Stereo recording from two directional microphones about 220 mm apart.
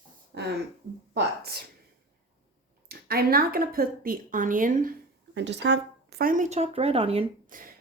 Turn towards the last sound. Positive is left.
turn(degrees=-25)  # may be behind; listen again after turning